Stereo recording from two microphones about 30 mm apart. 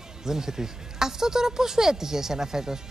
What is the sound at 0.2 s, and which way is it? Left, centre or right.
A man's voice, centre.